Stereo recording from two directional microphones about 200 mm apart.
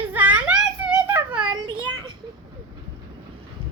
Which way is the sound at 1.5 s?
25° right (ahead or behind).